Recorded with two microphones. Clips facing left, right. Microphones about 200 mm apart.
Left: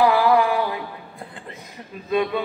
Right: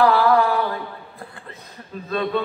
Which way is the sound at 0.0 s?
15° left (ahead or behind).